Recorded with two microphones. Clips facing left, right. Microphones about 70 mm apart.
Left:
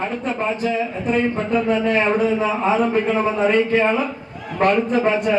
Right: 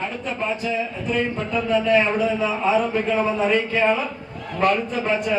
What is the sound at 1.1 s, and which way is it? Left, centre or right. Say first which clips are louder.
A man's voice: left 4 dB; left.